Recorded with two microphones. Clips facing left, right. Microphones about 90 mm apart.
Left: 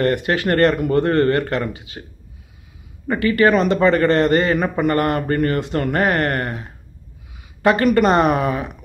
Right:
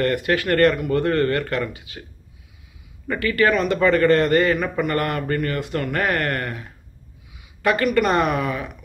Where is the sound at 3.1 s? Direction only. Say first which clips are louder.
Left 4 dB; 25° left (ahead or behind).